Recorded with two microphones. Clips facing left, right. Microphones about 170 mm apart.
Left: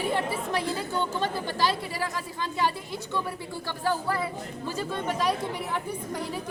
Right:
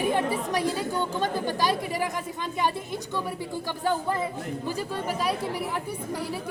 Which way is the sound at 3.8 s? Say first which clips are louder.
Right 1 dB; 20° right (ahead or behind).